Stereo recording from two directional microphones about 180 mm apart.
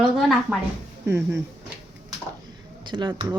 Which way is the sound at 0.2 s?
Centre (ahead or behind).